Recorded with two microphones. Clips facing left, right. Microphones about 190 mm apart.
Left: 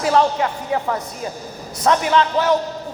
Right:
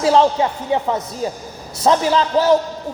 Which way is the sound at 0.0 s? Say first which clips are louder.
Right 3 dB; 30° right (ahead or behind).